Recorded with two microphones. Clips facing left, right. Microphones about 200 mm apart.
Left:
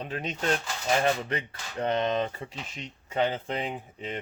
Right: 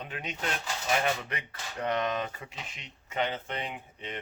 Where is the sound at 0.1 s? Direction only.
35° left (ahead or behind).